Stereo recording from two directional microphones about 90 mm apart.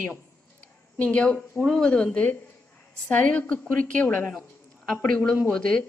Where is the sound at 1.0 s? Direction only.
15° left (ahead or behind).